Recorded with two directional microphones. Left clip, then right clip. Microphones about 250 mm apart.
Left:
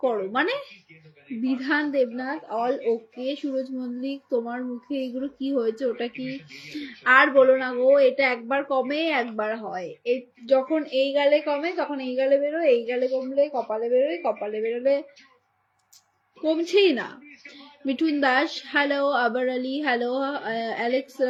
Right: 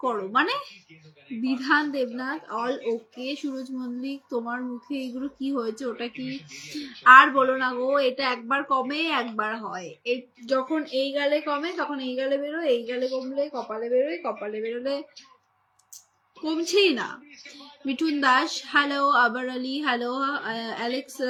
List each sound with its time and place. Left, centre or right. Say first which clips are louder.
0.0 s a woman's voice: even; centre
16.4 s a woman's voice: left 2 dB; centre
18.2 s a woman's voice: right 3 dB; centre